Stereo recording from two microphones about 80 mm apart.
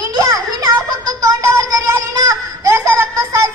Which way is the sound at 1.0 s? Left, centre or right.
Right.